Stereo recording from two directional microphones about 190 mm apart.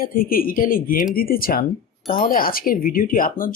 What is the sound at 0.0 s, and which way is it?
Speech, 50° left (ahead or behind).